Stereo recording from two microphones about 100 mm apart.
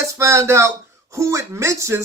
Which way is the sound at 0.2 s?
30° right (ahead or behind).